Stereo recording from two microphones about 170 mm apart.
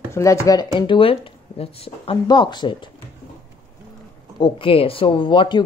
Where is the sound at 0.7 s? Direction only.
30° left (ahead or behind).